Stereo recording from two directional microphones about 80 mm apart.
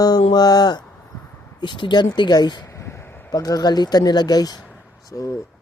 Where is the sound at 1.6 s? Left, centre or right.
Left.